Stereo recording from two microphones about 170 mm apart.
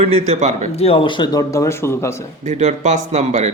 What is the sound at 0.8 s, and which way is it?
Speech, 35° left (ahead or behind).